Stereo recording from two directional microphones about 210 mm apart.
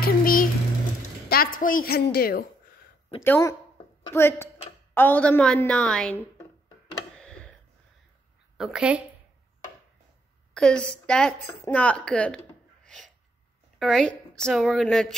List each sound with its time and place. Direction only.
0.0 s a sound: 40° left (ahead or behind)
1.3 s a woman's voice: 45° left (ahead or behind)
3.3 s a woman's voice: 10° left (ahead or behind)
7.2 s tick: 5° left (ahead or behind)
8.5 s a woman's voice: centre (ahead or behind)
10.5 s a woman's voice: 5° left (ahead or behind)
12.8 s a sound: centre (ahead or behind)
13.7 s a woman's voice: centre (ahead or behind)